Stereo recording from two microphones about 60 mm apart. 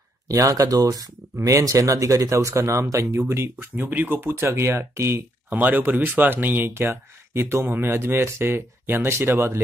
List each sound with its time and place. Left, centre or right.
0.3 s speech: right
1.4 s speech: right
2.3 s speech: right
5.5 s speech: right